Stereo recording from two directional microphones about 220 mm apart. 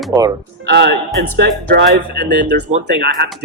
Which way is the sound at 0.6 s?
50° right (ahead or behind).